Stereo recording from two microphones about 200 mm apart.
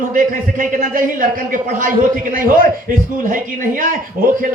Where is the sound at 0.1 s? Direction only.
40° right (ahead or behind).